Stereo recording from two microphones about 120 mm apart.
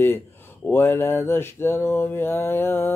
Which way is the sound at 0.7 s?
20° left (ahead or behind).